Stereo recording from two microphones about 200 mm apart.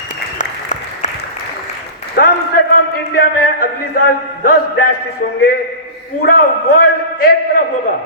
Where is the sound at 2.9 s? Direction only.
50° left (ahead or behind).